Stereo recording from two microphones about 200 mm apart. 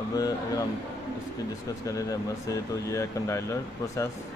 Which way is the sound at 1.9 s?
15° left (ahead or behind).